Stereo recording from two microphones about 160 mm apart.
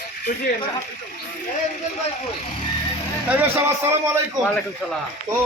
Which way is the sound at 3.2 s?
15° right (ahead or behind).